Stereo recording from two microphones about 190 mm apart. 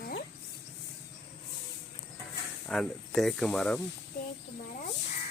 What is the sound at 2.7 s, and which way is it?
Speech, centre (ahead or behind).